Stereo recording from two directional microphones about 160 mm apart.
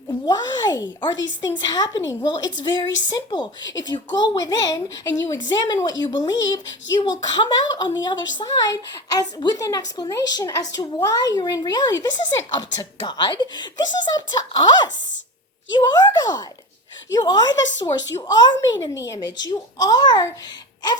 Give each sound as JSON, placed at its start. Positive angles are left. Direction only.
{"t": 0.1, "sound": "speech", "side_deg": 25}